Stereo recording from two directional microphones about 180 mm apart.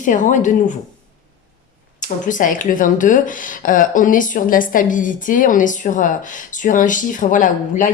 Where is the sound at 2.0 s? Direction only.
45° left (ahead or behind).